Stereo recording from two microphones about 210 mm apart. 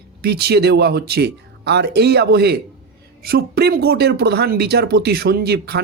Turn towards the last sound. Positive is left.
turn(degrees=-50)  # may be behind; listen again after turning